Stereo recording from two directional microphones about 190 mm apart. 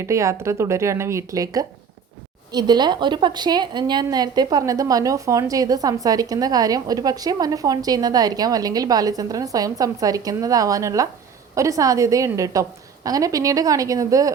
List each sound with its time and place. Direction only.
0.0 s a woman's voice: 15° right (ahead or behind)